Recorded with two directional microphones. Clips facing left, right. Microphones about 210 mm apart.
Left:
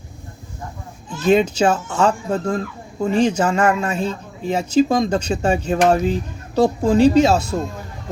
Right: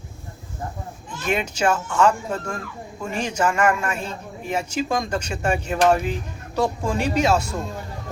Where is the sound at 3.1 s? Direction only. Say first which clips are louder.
Left 5 dB; 35° left (ahead or behind).